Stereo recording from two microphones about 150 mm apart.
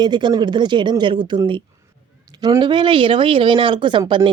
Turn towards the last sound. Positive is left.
turn(degrees=-35)  # may be behind; listen again after turning